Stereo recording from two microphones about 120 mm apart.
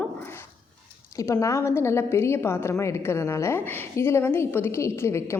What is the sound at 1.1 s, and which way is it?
A woman's voice, 25° left (ahead or behind).